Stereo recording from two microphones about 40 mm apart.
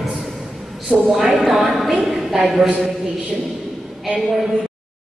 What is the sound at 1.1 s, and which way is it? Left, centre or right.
Speech, right.